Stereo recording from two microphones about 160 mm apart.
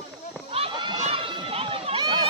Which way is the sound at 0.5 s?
35° right (ahead or behind).